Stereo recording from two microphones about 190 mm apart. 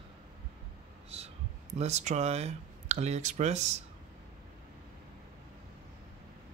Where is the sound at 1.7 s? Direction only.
35° right (ahead or behind).